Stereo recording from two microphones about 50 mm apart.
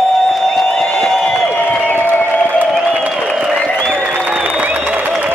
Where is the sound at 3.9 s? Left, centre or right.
Right.